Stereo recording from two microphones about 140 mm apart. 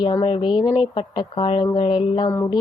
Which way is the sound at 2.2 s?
15° left (ahead or behind).